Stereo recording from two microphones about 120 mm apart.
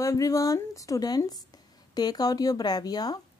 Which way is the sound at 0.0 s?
25° left (ahead or behind).